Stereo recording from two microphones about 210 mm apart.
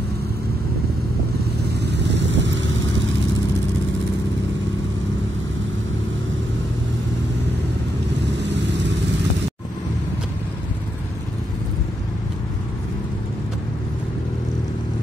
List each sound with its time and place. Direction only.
1.8 s vehicle: 55° right (ahead or behind)